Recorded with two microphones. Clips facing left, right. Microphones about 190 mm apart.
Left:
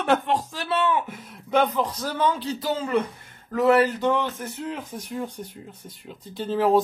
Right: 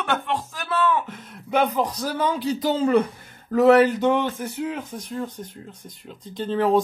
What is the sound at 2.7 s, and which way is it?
Speech, 35° right (ahead or behind).